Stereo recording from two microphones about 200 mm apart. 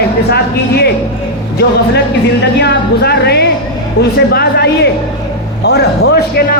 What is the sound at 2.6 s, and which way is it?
Music, 55° left (ahead or behind).